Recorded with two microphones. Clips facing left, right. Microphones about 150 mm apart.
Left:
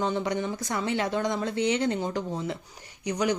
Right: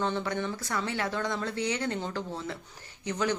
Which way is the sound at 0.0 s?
15° left (ahead or behind).